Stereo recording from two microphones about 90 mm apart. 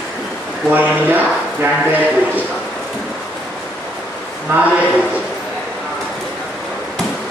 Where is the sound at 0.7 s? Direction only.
20° right (ahead or behind).